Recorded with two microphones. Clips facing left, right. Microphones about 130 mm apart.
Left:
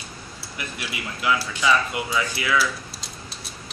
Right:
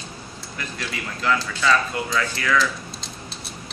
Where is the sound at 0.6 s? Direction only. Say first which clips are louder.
Right 1 dB; 15° left (ahead or behind).